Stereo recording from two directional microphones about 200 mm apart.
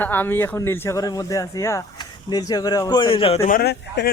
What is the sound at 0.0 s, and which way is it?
Speech, 10° left (ahead or behind).